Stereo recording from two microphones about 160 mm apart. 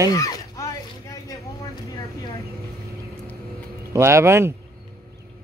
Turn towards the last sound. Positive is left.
turn(degrees=-15)  # may be behind; listen again after turning